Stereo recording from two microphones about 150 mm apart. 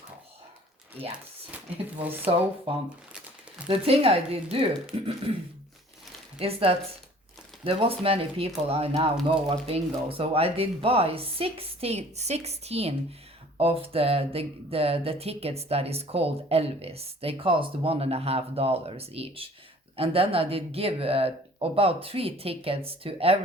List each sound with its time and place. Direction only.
2.3 s speech: 40° right (ahead or behind)
6.4 s speech: 40° right (ahead or behind)